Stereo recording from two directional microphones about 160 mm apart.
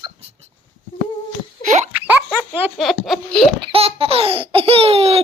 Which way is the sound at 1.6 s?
50° right (ahead or behind).